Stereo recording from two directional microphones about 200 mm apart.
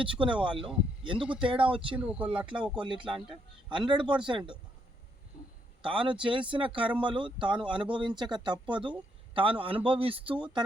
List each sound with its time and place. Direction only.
0.0 s speech: 25° right (ahead or behind)
2.0 s speech: 5° right (ahead or behind)
2.8 s speech: 25° right (ahead or behind)
5.8 s speech: 25° right (ahead or behind)